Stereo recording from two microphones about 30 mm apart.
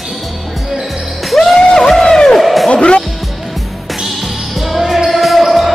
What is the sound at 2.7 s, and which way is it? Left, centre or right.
Music, left.